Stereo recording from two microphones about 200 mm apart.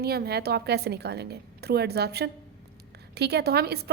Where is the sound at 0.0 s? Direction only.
50° right (ahead or behind).